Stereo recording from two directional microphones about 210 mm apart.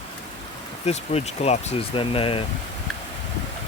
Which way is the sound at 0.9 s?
30° left (ahead or behind).